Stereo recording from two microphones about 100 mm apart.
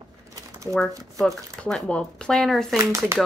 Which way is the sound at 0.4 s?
30° right (ahead or behind).